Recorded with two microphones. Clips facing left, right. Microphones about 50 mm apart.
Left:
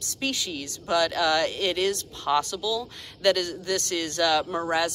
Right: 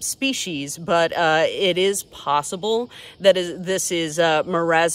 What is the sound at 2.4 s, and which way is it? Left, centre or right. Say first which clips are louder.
Speech: right 7 dB; right.